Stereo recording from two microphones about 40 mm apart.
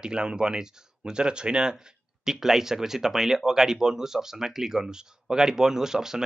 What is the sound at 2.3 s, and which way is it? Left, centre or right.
Speech, centre.